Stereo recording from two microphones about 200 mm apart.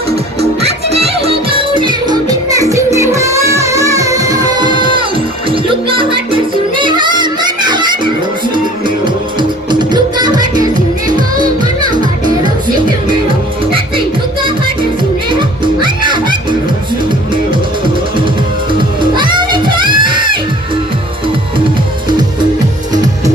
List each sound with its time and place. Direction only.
0.6 s music: 30° right (ahead or behind)
9.4 s music: 20° right (ahead or behind)
15.3 s music: 25° right (ahead or behind)
18.7 s music: 25° right (ahead or behind)